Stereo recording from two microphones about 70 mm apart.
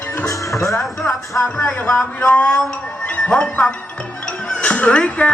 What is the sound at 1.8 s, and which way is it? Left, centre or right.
Speech, centre.